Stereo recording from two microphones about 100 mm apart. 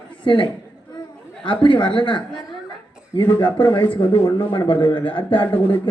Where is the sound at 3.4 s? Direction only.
55° left (ahead or behind).